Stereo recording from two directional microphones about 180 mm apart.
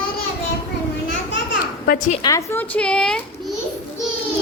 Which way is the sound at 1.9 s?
45° left (ahead or behind).